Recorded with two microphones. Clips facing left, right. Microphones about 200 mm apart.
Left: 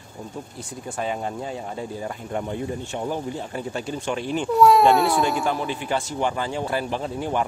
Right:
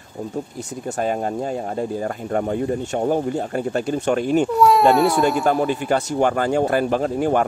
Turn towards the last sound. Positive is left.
turn(degrees=-50)  # may be behind; listen again after turning